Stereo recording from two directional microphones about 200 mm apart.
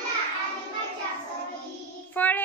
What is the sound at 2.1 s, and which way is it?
Child singing, 10° left (ahead or behind).